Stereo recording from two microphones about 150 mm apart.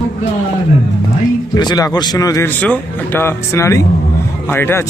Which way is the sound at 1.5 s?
25° left (ahead or behind).